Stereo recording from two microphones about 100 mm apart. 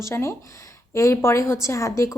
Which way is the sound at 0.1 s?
25° left (ahead or behind).